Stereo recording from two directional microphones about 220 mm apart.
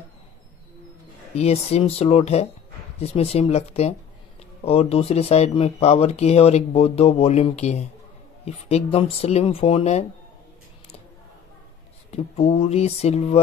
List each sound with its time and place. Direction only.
1.3 s speech: 30° left (ahead or behind)
12.1 s speech: 25° left (ahead or behind)